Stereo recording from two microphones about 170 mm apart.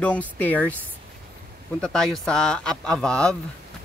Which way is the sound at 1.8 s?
5° left (ahead or behind).